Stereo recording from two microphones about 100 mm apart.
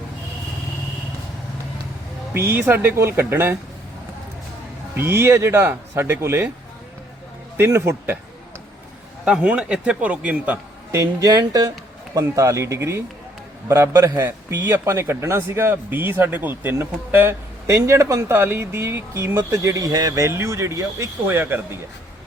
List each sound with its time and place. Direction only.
2.3 s a man's voice: 25° right (ahead or behind)
4.9 s a man's voice: 25° right (ahead or behind)
7.5 s a man's voice: 25° right (ahead or behind)
9.2 s a man's voice: 10° right (ahead or behind)
10.9 s a man's voice: 35° right (ahead or behind)